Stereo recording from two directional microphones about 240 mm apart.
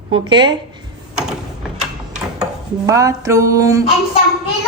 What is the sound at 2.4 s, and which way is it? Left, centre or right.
Dishes, centre.